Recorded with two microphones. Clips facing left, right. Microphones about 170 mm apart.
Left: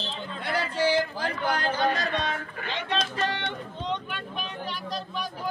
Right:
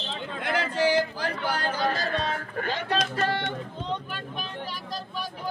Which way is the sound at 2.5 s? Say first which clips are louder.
Right 3 dB; 45° right (ahead or behind).